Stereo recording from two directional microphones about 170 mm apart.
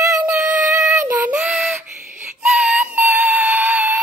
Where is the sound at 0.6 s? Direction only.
15° right (ahead or behind).